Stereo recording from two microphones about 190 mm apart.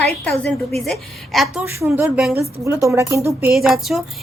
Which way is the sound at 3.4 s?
Centre (ahead or behind).